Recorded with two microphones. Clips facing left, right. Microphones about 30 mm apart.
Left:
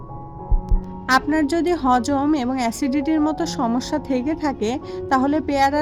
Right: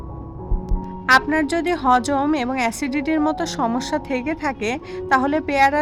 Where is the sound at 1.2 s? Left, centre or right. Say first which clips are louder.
Left 1 dB; centre.